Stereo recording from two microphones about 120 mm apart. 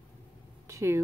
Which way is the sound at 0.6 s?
25° right (ahead or behind).